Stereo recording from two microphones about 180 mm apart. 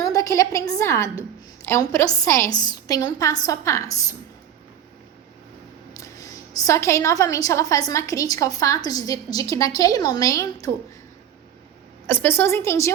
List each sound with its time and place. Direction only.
0.0 s a woman's voice: 20° left (ahead or behind)
6.0 s a woman's voice: 20° left (ahead or behind)
12.0 s a woman's voice: 10° left (ahead or behind)